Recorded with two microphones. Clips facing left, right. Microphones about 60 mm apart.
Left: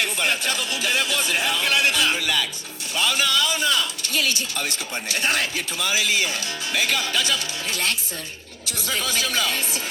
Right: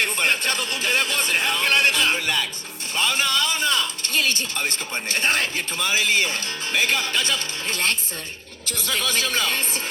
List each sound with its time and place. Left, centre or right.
0.0 s speech: right